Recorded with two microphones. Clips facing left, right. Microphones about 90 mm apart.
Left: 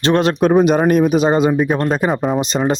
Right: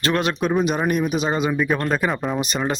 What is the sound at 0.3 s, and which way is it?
Speech, 50° left (ahead or behind).